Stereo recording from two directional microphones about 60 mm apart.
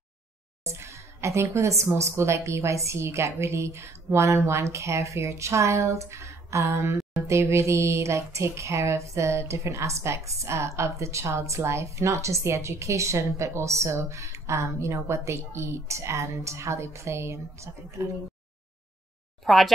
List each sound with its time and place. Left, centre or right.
0.7 s speech: right
19.4 s speech: centre